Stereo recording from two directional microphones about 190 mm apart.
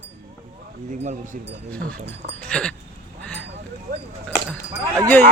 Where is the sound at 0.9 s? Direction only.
40° right (ahead or behind).